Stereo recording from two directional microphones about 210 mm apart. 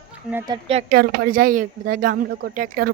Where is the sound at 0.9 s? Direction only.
45° right (ahead or behind).